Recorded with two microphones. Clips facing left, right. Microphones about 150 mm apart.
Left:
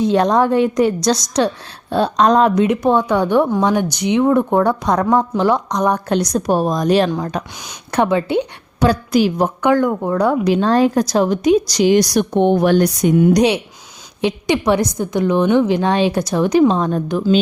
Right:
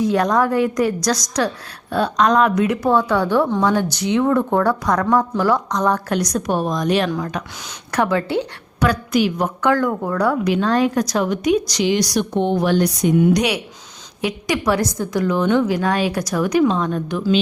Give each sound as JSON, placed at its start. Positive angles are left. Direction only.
{"t": 0.0, "sound": "a woman's voice", "side_deg": 25}
{"t": 2.6, "sound": "a woman's voice", "side_deg": 20}
{"t": 8.9, "sound": "speech", "side_deg": 30}
{"t": 9.6, "sound": "speech", "side_deg": 20}
{"t": 14.2, "sound": "a woman's voice", "side_deg": 25}